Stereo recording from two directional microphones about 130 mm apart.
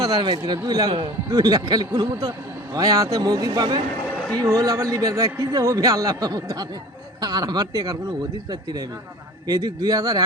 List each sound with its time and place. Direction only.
0.0 s a man's voice: 30° right (ahead or behind)
9.5 s a man's voice: 30° right (ahead or behind)